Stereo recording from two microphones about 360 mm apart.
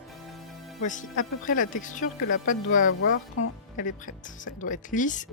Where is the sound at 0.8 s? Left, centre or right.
Left.